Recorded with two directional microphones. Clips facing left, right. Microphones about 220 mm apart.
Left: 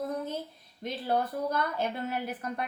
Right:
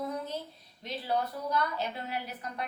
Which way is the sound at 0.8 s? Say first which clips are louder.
Left 3 dB; 50° left (ahead or behind).